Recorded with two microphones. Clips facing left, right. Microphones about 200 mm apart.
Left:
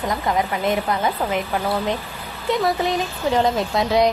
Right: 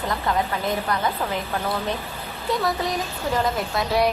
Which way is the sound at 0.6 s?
20° left (ahead or behind).